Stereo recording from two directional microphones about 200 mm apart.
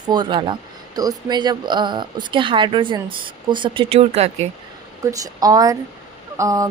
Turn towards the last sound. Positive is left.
turn(degrees=-15)  # may be behind; listen again after turning